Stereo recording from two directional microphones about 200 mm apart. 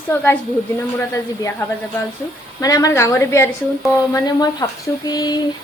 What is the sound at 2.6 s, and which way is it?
A woman's voice, 15° left (ahead or behind).